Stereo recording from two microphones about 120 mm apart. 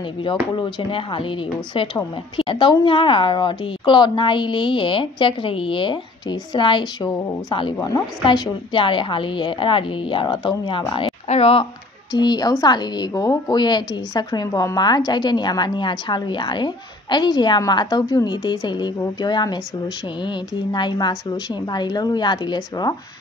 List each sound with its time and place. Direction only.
0.2 s a woman's voice: 40° left (ahead or behind)
11.2 s speech: 55° left (ahead or behind)
12.1 s speech: 35° left (ahead or behind)